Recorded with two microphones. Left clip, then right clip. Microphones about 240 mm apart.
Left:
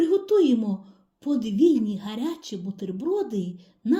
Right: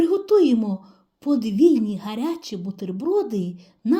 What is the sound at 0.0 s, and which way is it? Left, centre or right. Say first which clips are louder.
A woman's voice: right 3 dB; right.